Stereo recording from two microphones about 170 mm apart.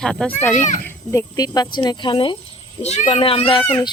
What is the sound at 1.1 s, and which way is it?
Speech, 20° left (ahead or behind).